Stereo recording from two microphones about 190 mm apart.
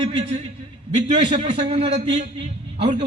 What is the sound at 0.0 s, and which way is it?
Speech, 25° right (ahead or behind).